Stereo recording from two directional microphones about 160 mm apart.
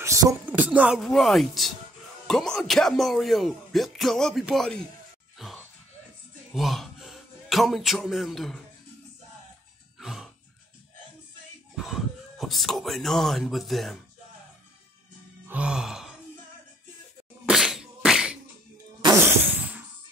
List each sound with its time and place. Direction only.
0.0 s music: 20° right (ahead or behind)
0.5 s speech: 10° right (ahead or behind)
5.4 s dog: centre (ahead or behind)
6.5 s speech: centre (ahead or behind)
9.9 s music: centre (ahead or behind)
11.7 s speech: centre (ahead or behind)
15.4 s groan: 5° right (ahead or behind)
17.5 s a sound: centre (ahead or behind)